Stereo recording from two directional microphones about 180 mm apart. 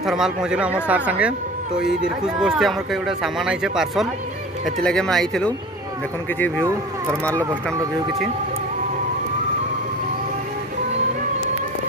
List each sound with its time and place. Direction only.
0.0 s speech: 5° right (ahead or behind)
6.6 s speech: 20° right (ahead or behind)